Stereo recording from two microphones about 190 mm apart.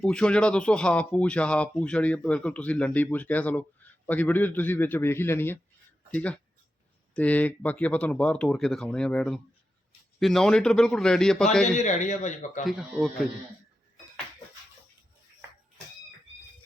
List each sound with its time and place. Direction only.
0.0 s a man's voice: 5° left (ahead or behind)
11.8 s speech: 40° left (ahead or behind)
12.6 s a man's voice: centre (ahead or behind)